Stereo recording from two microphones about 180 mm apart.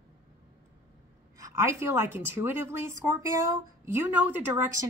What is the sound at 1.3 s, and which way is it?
A woman's voice, 15° right (ahead or behind).